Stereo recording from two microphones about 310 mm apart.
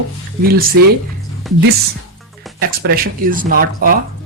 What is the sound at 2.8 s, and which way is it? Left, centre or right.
Speech, right.